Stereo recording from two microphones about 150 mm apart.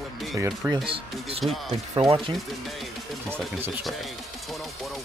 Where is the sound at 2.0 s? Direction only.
40° right (ahead or behind).